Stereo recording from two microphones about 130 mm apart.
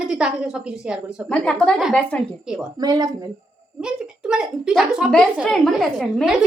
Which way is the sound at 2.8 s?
30° right (ahead or behind).